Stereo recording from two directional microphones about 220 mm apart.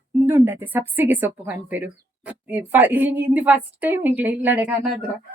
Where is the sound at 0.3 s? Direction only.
10° right (ahead or behind).